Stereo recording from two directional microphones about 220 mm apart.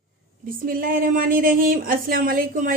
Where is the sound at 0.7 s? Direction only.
40° right (ahead or behind).